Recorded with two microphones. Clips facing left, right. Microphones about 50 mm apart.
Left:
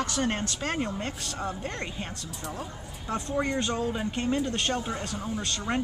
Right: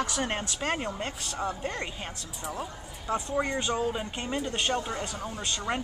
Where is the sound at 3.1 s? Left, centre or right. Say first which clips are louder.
Even; centre.